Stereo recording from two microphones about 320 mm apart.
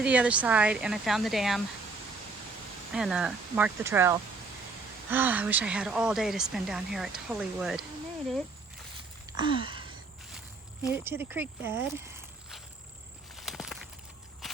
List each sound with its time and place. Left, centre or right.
0.0 s speech: centre
2.9 s speech: centre
9.4 s a sound: centre
10.8 s speech: centre
13.3 s walk: centre